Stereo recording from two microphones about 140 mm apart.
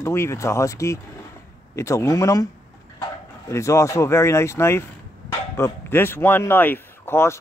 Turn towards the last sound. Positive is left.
turn(degrees=15)  # may be behind; listen again after turning